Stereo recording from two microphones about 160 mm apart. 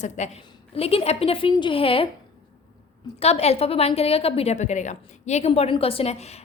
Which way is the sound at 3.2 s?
40° left (ahead or behind).